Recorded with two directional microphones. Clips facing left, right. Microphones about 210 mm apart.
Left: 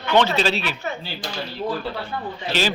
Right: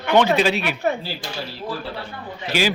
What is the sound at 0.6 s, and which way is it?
Speech, 55° right (ahead or behind).